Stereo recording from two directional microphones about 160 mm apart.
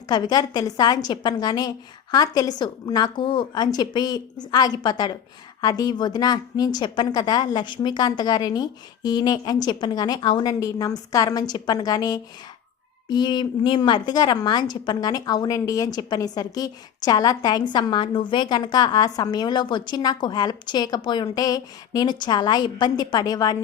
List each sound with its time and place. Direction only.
0.1 s a woman's voice: 25° left (ahead or behind)